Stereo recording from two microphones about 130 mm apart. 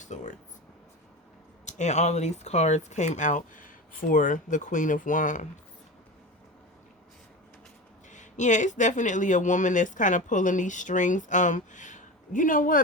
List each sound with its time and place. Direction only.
0.0 s a sound: 70° left (ahead or behind)
1.6 s speech: 65° left (ahead or behind); by 5.5 s 85° left
8.1 s speech: 70° left (ahead or behind); by 12.8 s 90° left